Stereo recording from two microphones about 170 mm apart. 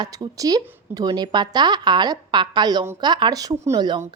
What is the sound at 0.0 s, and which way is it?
A woman's voice, 20° right (ahead or behind).